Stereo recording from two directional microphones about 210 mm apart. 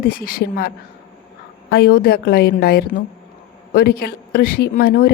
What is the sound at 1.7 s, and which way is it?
A woman's voice, 50° left (ahead or behind).